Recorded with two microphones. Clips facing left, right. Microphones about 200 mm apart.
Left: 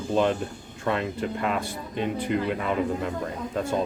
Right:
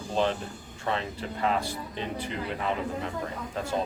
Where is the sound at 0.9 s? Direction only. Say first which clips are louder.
Left 5 dB; 55° left (ahead or behind).